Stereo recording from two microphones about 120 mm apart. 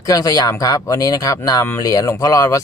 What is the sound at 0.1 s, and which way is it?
Speech, 30° left (ahead or behind).